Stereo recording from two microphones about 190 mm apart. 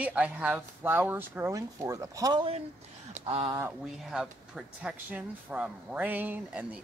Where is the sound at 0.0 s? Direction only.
5° right (ahead or behind).